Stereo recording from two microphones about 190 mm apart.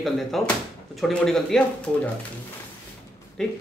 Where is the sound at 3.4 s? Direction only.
5° left (ahead or behind).